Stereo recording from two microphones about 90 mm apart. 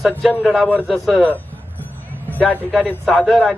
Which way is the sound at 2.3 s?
15° left (ahead or behind).